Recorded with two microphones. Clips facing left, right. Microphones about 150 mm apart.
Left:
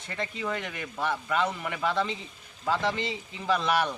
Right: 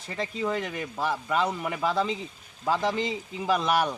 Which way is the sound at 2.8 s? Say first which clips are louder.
Right 3 dB; 40° right (ahead or behind).